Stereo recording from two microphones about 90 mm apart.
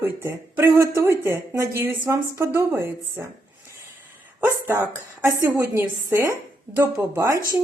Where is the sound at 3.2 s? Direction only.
20° right (ahead or behind).